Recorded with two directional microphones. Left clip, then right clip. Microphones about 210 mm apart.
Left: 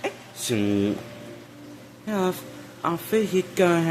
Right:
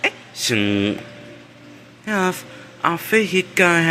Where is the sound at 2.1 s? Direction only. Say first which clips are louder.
Right 5 dB; 5° right (ahead or behind).